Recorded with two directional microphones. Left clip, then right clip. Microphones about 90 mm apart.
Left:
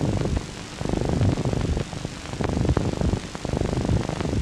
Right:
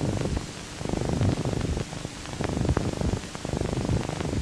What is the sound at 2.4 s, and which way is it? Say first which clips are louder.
Purr: left 3 dB; 25° right (ahead or behind).